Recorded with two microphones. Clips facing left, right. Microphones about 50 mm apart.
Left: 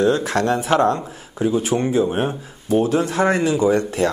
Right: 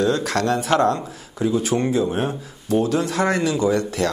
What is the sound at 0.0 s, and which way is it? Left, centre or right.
Speech, left.